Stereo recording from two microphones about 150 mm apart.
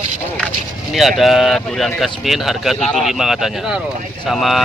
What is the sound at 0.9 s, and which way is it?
Speech, centre (ahead or behind).